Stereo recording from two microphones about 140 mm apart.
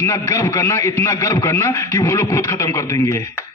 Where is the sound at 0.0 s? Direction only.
20° left (ahead or behind).